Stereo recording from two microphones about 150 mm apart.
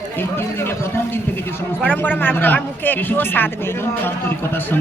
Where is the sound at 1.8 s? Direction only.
10° left (ahead or behind).